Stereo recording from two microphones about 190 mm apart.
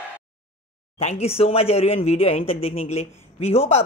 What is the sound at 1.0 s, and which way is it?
Speech, 35° left (ahead or behind).